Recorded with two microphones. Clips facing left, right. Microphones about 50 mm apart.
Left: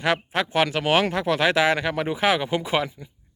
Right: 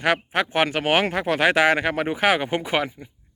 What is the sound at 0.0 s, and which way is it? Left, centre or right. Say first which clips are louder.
A man's voice: right 2 dB; right.